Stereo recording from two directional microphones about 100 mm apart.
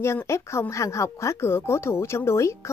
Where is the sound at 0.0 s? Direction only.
25° left (ahead or behind).